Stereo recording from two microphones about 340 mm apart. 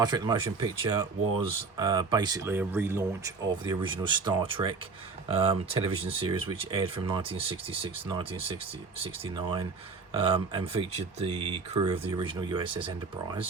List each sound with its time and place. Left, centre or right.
0.0 s speech: centre